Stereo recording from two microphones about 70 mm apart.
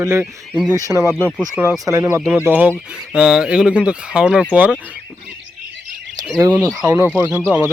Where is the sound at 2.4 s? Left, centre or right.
Right.